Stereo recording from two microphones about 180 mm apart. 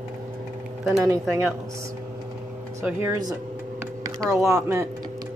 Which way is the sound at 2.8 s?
15° right (ahead or behind).